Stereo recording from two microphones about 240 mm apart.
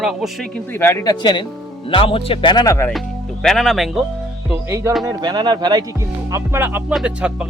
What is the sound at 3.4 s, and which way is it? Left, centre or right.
Speech, centre.